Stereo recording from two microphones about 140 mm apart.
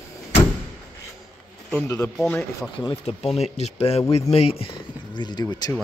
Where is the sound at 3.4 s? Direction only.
50° left (ahead or behind); by 5.7 s 30° left (ahead or behind).